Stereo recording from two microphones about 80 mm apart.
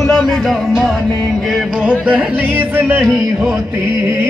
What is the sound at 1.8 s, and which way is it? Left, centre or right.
Speech, centre.